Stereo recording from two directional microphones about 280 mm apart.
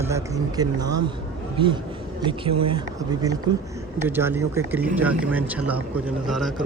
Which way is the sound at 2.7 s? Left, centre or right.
Centre.